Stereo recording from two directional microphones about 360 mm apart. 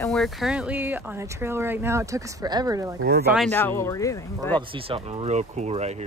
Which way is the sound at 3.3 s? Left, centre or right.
Centre.